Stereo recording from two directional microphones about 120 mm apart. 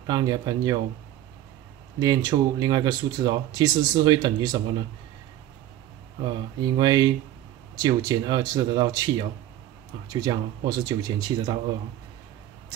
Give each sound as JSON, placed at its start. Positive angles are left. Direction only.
{"t": 0.0, "sound": "speech", "side_deg": -35}
{"t": 2.0, "sound": "speech", "side_deg": -35}
{"t": 6.6, "sound": "speech", "side_deg": -35}